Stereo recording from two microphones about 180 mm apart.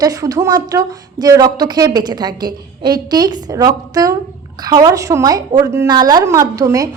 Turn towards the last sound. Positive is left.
turn(degrees=-20)  # may be behind; listen again after turning